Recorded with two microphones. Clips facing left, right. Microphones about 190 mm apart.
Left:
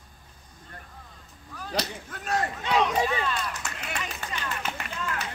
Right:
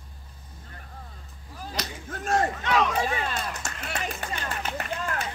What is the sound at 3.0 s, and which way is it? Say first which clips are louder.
Run: left 1 dB; 45° right (ahead or behind).